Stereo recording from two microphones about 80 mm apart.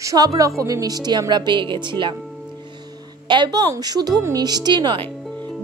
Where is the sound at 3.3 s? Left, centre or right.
Right.